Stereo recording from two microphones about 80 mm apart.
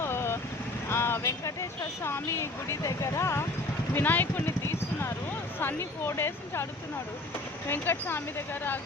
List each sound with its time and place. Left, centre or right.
0.0 s vehicle: left
1.2 s speech: left
3.9 s speech: left
7.7 s speech: left